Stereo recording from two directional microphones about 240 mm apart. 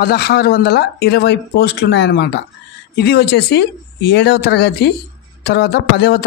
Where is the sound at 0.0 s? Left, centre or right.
Left.